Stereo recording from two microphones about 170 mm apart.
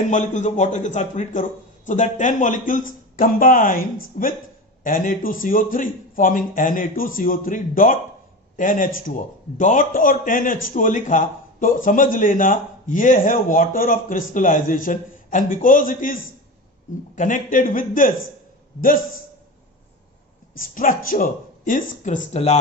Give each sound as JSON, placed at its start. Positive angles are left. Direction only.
{"t": 0.1, "sound": "a man's voice", "side_deg": 45}
{"t": 20.6, "sound": "a man's voice", "side_deg": 55}